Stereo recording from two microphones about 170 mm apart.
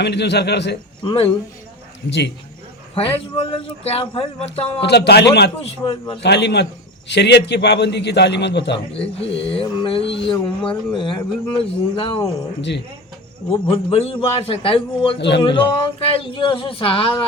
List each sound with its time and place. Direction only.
0.0 s a man's voice: 80° left
1.0 s speech: 30° left (ahead or behind)
2.0 s a man's voice: 90° left
3.3 s speech: 35° left (ahead or behind)
4.8 s a man's voice: 80° left
5.6 s speech: 30° left (ahead or behind)
6.2 s a man's voice: 80° left
9.5 s speech: 30° left (ahead or behind)
13.5 s speech: 35° left (ahead or behind)